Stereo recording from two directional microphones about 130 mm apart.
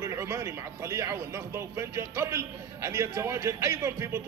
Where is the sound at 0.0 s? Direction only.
20° right (ahead or behind).